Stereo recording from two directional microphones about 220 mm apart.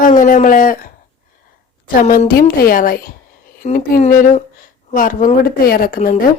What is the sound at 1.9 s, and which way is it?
Speech, 35° left (ahead or behind).